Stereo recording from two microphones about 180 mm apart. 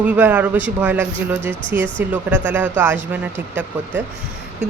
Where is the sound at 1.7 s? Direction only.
90° right.